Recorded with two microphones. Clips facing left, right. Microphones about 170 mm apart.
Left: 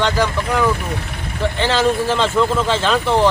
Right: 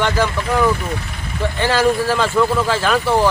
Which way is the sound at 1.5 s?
20° left (ahead or behind).